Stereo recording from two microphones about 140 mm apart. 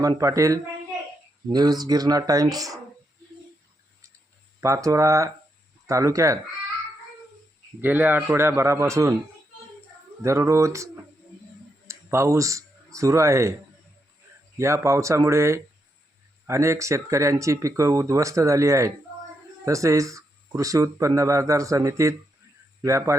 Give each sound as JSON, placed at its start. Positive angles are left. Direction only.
{"t": 0.0, "sound": "speech", "side_deg": -25}
{"t": 4.6, "sound": "speech", "side_deg": -20}
{"t": 7.8, "sound": "a man's voice", "side_deg": -15}
{"t": 10.2, "sound": "speech", "side_deg": -20}
{"t": 11.9, "sound": "speech", "side_deg": -20}
{"t": 14.6, "sound": "speech", "side_deg": -20}